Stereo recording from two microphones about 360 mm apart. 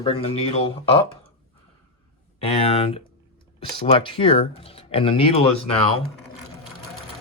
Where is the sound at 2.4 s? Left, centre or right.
Centre.